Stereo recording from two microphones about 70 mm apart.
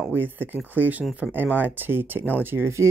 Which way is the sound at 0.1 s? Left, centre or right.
Right.